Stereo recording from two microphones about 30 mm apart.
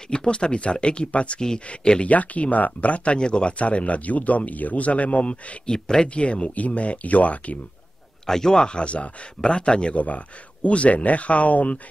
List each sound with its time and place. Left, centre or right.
0.1 s speech: left
2.0 s speech: left
3.2 s speech: left
3.5 s speech: left
5.7 s speech: left
6.0 s speech: left
8.3 s speech: centre
8.6 s speech: left
9.9 s speech: left